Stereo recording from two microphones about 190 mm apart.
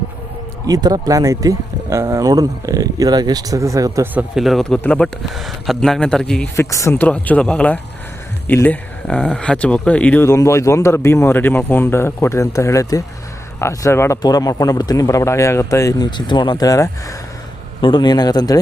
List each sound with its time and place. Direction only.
0.7 s speech: 20° right (ahead or behind); by 6.7 s 5° left (ahead or behind)
6.7 s speech: 15° left (ahead or behind)